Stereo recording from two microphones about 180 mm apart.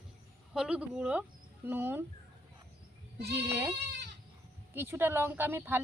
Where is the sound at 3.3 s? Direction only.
15° right (ahead or behind).